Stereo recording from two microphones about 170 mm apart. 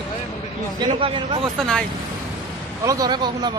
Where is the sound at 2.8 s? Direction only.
20° right (ahead or behind).